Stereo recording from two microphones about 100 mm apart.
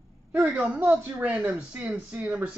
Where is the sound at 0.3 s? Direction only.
15° right (ahead or behind).